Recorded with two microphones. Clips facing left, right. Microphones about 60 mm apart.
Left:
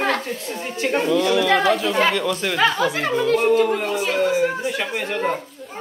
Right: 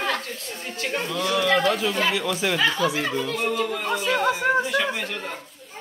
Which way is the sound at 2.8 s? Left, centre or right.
Left.